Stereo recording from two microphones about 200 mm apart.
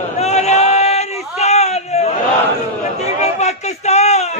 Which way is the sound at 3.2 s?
35° left (ahead or behind).